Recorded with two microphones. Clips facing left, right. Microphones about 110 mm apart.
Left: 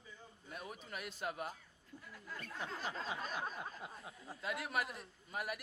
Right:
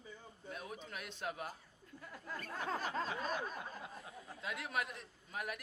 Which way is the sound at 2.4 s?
45° right (ahead or behind).